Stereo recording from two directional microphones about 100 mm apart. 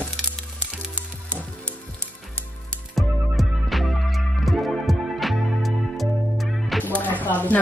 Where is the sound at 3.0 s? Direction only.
Centre (ahead or behind).